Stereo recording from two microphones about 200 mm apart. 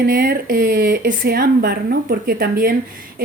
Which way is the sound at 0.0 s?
50° right (ahead or behind).